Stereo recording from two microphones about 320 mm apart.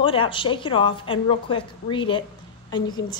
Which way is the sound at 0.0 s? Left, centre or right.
Centre.